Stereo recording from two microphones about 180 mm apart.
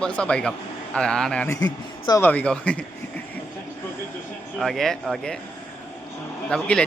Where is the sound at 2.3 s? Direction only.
5° left (ahead or behind).